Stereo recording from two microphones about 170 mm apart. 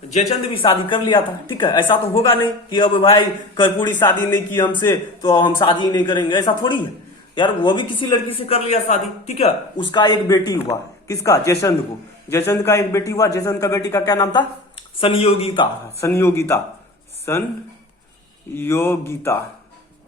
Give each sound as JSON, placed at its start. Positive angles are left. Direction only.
{"t": 0.1, "sound": "speech", "side_deg": 40}
{"t": 0.6, "sound": "a man's voice", "side_deg": 30}
{"t": 16.0, "sound": "speech", "side_deg": 15}
{"t": 18.5, "sound": "speech", "side_deg": 15}